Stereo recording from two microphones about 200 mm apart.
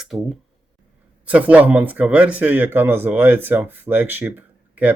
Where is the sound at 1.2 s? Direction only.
5° right (ahead or behind).